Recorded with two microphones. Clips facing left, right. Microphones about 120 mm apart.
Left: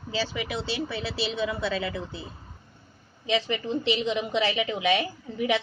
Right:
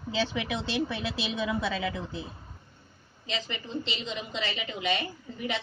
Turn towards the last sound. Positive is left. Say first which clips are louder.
# left 7 dB
turn(degrees=90)